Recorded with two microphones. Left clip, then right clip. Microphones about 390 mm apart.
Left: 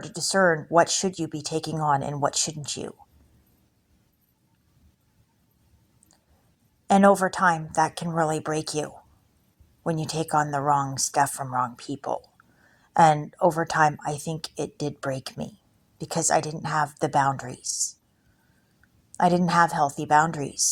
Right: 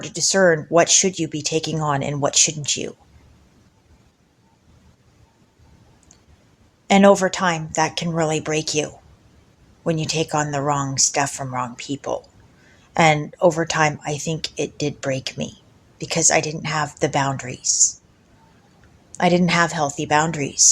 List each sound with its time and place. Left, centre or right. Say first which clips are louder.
0.0 s speech: right 5 dB; left
6.8 s speech: right 4 dB; left
19.1 s speech: right 3 dB; left